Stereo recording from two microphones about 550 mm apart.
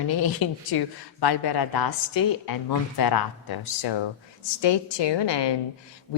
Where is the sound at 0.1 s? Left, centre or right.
Left.